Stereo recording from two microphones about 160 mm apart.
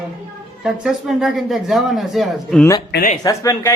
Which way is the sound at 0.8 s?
5° right (ahead or behind).